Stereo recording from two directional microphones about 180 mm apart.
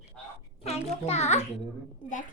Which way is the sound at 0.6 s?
35° left (ahead or behind).